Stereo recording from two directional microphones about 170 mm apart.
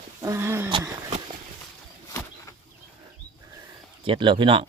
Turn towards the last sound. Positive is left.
turn(degrees=-30)  # may be behind; listen again after turning